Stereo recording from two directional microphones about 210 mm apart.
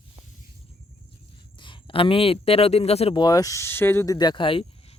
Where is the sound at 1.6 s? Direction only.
20° left (ahead or behind).